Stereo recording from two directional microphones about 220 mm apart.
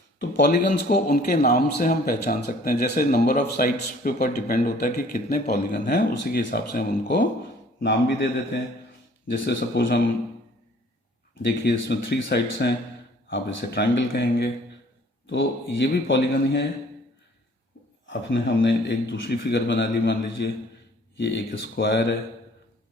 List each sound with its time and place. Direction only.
0.2 s a man's voice: 50° left (ahead or behind)
9.5 s a man's voice: 50° left (ahead or behind)
11.4 s a man's voice: 50° left (ahead or behind)
18.6 s a man's voice: 55° left (ahead or behind)